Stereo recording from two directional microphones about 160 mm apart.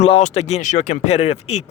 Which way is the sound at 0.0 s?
45° left (ahead or behind).